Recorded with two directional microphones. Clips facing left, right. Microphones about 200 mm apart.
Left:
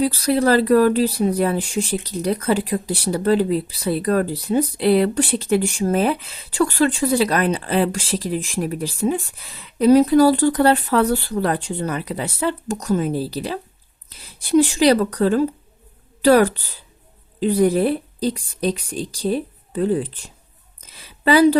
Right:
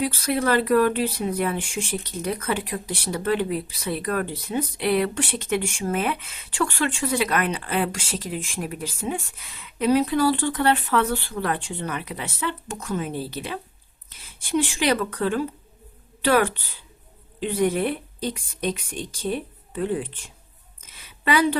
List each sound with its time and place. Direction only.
0.0 s speech: 35° left (ahead or behind)